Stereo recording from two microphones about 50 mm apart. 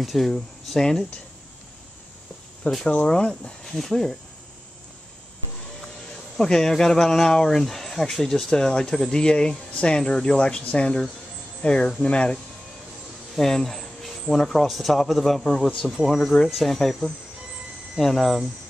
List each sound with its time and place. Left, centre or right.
0.0 s speech: centre
2.9 s speech: centre
3.6 s speech: centre
6.3 s speech: centre
13.4 s cricket: centre
14.3 s speech: centre